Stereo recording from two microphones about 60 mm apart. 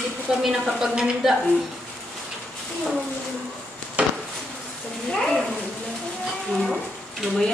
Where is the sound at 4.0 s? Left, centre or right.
Centre.